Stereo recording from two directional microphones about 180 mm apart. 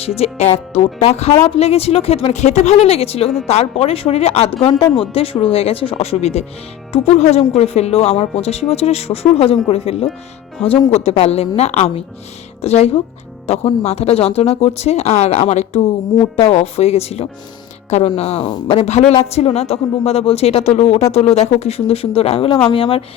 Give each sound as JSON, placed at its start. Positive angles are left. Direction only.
{"t": 0.2, "sound": "speech", "side_deg": 35}